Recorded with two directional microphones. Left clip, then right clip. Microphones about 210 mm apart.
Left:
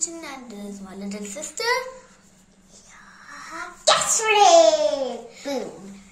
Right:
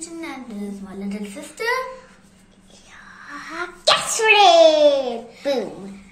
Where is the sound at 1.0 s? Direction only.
50° left (ahead or behind).